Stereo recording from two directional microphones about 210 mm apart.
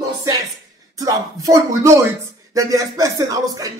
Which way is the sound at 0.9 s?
15° right (ahead or behind).